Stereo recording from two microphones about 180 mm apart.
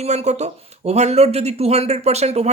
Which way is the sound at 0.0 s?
35° right (ahead or behind).